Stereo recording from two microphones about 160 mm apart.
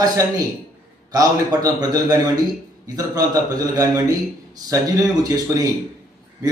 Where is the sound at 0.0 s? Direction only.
20° right (ahead or behind).